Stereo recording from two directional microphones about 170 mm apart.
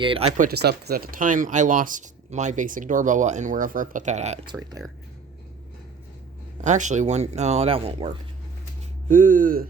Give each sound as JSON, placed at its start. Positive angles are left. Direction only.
{"t": 0.0, "sound": "speech", "side_deg": -30}
{"t": 0.3, "sound": "speech", "side_deg": -65}
{"t": 6.6, "sound": "speech", "side_deg": -45}
{"t": 9.0, "sound": "speech", "side_deg": -50}